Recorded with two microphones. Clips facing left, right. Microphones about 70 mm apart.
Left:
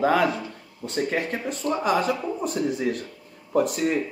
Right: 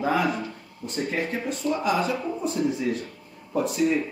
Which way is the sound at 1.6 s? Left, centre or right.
Left.